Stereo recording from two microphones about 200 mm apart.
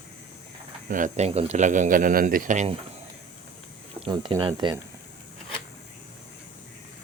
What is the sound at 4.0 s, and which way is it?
Speech, 25° right (ahead or behind).